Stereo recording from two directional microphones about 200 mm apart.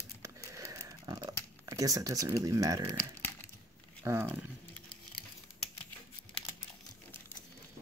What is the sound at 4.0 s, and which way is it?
Speech, 15° right (ahead or behind).